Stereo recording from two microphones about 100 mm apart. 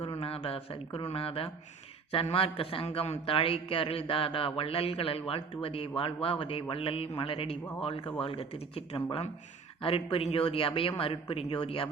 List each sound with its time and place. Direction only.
0.0 s a sound: 70° left (ahead or behind)
2.1 s a man's voice: 70° left (ahead or behind)
3.2 s a man's voice: 65° left (ahead or behind)
7.9 s a man's voice: 60° left (ahead or behind)
8.2 s a man's voice: 75° left (ahead or behind)